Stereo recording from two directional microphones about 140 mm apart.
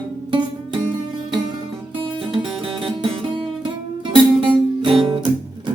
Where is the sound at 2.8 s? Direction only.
40° right (ahead or behind).